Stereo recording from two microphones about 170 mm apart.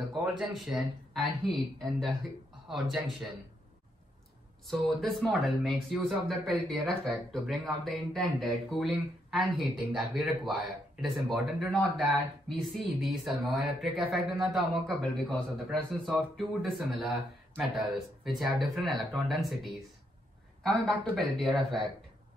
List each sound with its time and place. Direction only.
0.4 s speech: 5° right (ahead or behind)
2.7 s speech: centre (ahead or behind)
4.6 s speech: centre (ahead or behind)